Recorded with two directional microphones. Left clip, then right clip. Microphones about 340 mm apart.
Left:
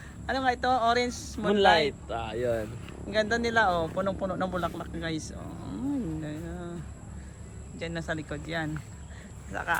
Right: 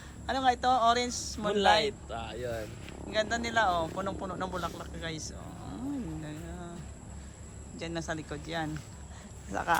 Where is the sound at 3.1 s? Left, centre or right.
Centre.